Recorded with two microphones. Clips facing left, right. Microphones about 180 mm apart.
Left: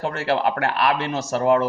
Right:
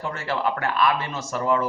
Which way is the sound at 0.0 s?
75° left (ahead or behind).